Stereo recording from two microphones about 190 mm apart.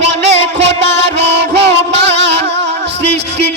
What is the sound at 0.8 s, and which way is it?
Music, 65° right (ahead or behind).